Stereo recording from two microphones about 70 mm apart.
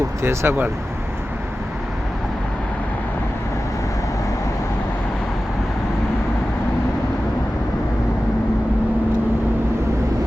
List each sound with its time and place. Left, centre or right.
0.2 s speech: right